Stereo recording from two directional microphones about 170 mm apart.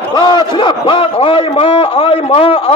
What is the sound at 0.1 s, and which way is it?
A man's voice, 25° left (ahead or behind).